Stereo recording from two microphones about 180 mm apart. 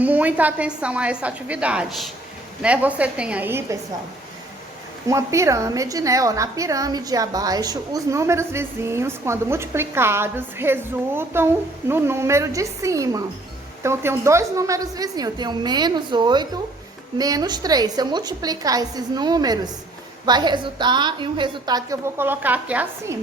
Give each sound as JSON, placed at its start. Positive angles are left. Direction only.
{"t": 0.0, "sound": "a woman's voice", "side_deg": -10}
{"t": 5.0, "sound": "a woman's voice", "side_deg": -15}